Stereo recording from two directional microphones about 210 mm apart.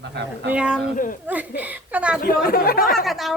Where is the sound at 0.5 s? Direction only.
5° right (ahead or behind).